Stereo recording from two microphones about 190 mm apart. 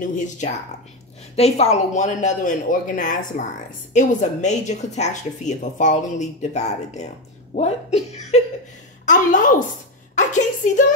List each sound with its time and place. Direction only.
0.0 s a woman's voice: 40° left (ahead or behind)